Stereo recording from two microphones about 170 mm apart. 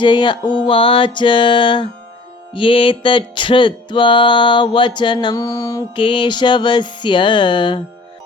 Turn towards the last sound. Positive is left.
turn(degrees=30)  # may be behind; listen again after turning